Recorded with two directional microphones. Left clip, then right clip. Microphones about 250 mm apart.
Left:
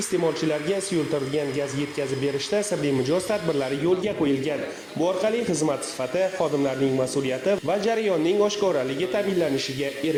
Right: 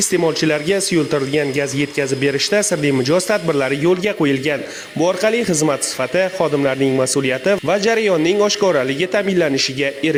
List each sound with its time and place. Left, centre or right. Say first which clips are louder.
0.1 s a man's voice: right 5 dB; right